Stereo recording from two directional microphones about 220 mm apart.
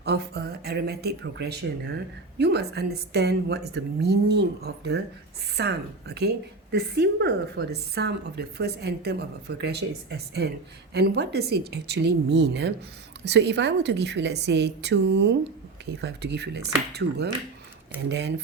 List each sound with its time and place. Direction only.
0.0 s a woman's voice: 50° right (ahead or behind)